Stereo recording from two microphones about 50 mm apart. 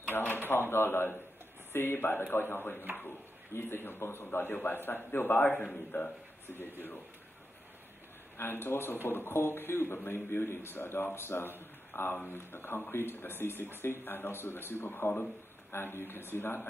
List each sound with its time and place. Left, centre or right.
0.0 s typewriter: left
1.7 s speech: left
8.4 s a man's voice: left